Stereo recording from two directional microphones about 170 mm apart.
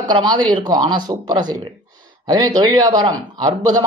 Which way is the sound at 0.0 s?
25° right (ahead or behind).